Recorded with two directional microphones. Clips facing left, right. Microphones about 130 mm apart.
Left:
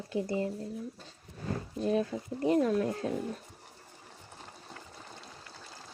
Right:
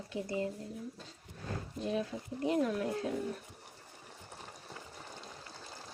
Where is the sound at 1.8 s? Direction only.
40° left (ahead or behind).